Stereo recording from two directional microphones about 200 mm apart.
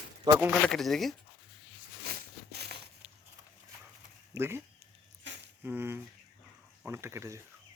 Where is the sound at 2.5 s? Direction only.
55° right (ahead or behind).